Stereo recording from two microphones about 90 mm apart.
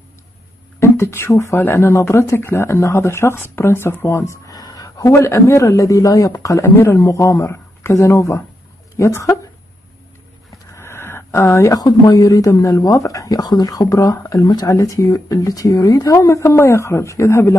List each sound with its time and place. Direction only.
0.7 s speech: 30° left (ahead or behind)
10.8 s a sound: 25° left (ahead or behind)
11.8 s speech: 45° left (ahead or behind)